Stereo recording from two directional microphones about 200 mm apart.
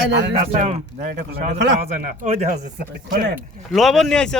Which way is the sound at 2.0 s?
35° right (ahead or behind).